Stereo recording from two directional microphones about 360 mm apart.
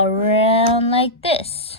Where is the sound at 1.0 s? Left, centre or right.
Centre.